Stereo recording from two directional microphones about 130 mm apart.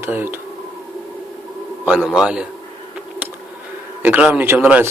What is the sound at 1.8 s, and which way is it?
Speech, 5° right (ahead or behind).